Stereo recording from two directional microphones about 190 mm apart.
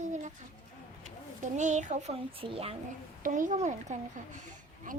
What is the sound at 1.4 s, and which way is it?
A child's voice, 40° right (ahead or behind).